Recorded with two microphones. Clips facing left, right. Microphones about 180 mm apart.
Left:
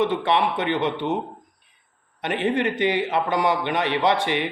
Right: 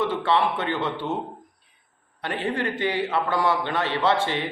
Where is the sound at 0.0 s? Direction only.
20° left (ahead or behind).